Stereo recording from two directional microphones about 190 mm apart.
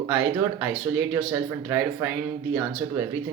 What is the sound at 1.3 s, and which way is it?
Speech, 10° right (ahead or behind).